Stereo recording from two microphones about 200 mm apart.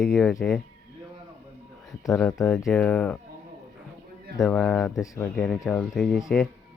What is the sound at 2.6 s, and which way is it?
Speech, 5° left (ahead or behind).